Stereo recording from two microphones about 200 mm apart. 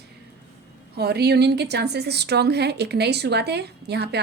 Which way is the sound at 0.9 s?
55° right (ahead or behind).